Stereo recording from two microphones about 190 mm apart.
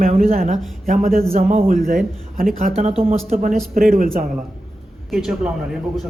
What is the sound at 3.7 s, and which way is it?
Speech, 50° right (ahead or behind).